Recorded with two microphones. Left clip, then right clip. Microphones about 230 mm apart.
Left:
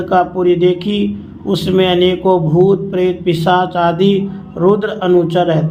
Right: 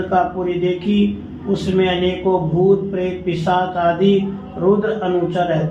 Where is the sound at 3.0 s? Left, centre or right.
Left.